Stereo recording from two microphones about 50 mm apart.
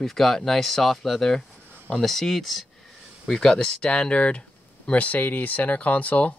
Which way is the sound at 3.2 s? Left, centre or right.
Centre.